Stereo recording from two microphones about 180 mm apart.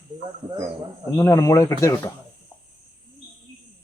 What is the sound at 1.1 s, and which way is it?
Speech, 20° left (ahead or behind).